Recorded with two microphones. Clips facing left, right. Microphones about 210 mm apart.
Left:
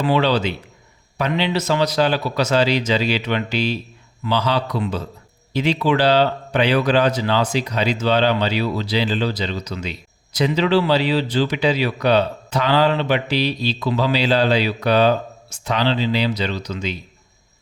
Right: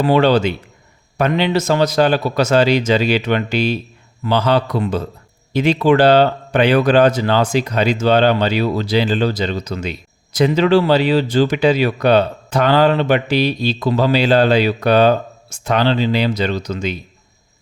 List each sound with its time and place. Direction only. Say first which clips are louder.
0.0 s speech: right 5 dB; 50° right (ahead or behind)